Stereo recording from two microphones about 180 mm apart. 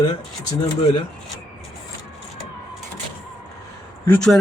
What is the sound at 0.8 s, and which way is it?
Speech, 35° left (ahead or behind).